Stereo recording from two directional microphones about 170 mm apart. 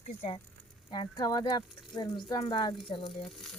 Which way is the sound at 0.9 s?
25° left (ahead or behind).